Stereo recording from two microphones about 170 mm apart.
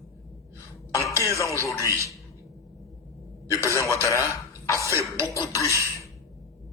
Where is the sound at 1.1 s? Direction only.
15° right (ahead or behind).